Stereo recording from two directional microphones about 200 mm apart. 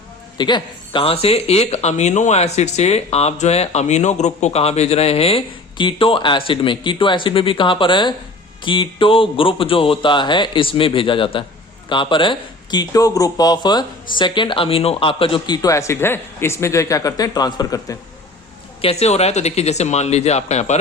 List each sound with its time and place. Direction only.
0.3 s speech: 20° left (ahead or behind)
18.8 s speech: 30° left (ahead or behind)